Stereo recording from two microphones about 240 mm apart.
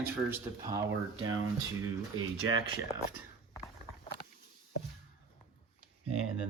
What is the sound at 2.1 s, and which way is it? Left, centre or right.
Speech, centre.